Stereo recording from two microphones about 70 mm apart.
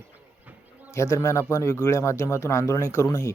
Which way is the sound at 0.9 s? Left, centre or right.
Left.